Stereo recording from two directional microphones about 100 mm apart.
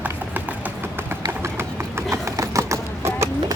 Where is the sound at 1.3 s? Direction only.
25° right (ahead or behind).